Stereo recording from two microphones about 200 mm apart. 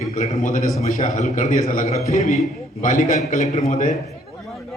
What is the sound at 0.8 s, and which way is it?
A man's voice, 35° left (ahead or behind).